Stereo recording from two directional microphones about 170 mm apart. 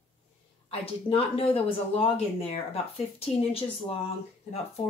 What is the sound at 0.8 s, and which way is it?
Speech, 35° left (ahead or behind).